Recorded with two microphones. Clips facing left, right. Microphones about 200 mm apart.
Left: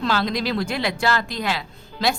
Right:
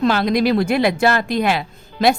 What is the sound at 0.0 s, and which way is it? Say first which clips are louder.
Speech: right 7 dB; 50° right (ahead or behind).